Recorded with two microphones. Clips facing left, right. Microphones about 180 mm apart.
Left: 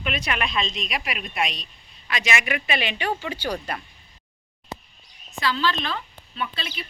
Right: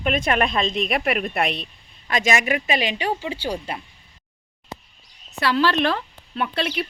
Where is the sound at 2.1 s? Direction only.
45° right (ahead or behind).